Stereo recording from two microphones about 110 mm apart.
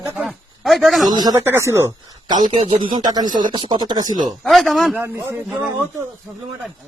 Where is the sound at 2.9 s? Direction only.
35° right (ahead or behind).